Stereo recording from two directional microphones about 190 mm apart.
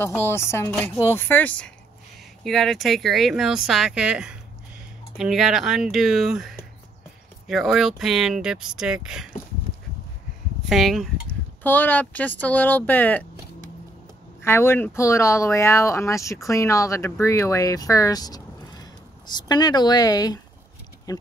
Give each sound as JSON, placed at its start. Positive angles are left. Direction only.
{"t": 0.0, "sound": "speech", "side_deg": 10}
{"t": 10.6, "sound": "speech", "side_deg": 0}
{"t": 14.4, "sound": "speech", "side_deg": 15}